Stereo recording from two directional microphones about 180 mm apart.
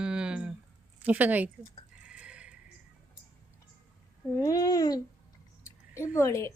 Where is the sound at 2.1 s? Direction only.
5° right (ahead or behind).